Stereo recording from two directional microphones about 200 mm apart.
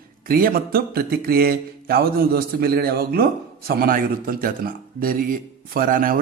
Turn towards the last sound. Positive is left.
turn(degrees=-45)  # may be behind; listen again after turning